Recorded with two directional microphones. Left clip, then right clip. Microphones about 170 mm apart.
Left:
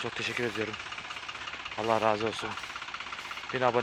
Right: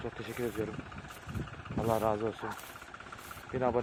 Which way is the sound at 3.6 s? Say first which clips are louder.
Left 4 dB; 5° left (ahead or behind).